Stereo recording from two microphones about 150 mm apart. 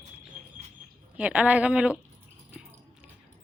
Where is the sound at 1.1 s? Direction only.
10° right (ahead or behind).